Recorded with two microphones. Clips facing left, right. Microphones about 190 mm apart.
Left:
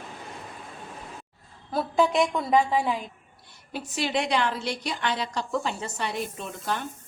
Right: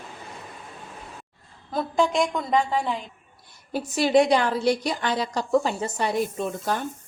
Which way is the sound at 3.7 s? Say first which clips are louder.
Right 9 dB; 40° right (ahead or behind).